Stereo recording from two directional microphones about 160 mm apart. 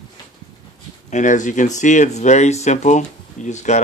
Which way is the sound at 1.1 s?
50° left (ahead or behind).